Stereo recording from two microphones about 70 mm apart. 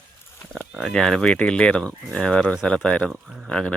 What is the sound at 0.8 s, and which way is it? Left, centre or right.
Speech, centre.